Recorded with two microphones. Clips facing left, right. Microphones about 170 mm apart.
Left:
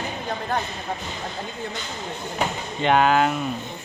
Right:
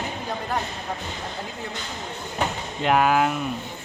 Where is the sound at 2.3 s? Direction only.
5° right (ahead or behind).